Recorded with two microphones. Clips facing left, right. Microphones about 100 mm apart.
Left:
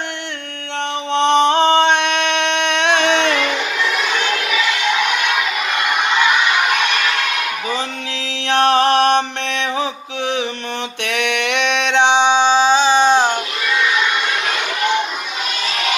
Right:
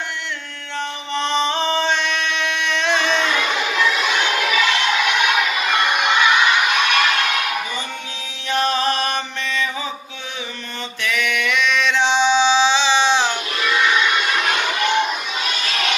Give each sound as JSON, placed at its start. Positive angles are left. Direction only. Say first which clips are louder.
{"t": 1.1, "sound": "music", "louder": "left 7 dB", "side_deg": 65}
{"t": 8.4, "sound": "mantra", "louder": "left 6 dB", "side_deg": 75}
{"t": 11.0, "sound": "a sound", "louder": "left 1 dB", "side_deg": 65}